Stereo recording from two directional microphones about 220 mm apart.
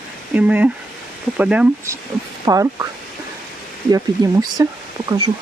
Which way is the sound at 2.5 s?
15° right (ahead or behind).